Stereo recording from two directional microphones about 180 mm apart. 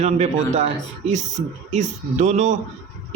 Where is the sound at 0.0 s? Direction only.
40° right (ahead or behind).